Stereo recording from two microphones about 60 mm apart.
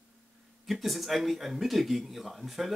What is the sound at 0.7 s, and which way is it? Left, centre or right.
Speech, centre.